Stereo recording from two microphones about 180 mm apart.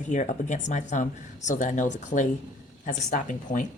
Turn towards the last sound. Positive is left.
turn(degrees=45)  # may be behind; listen again after turning